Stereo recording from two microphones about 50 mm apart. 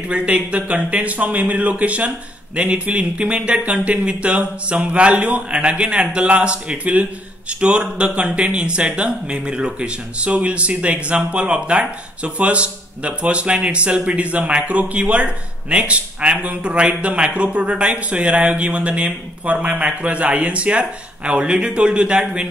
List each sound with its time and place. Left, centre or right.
0.1 s speech: right